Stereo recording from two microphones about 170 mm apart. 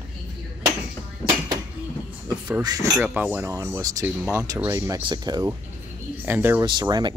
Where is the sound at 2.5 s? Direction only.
25° right (ahead or behind).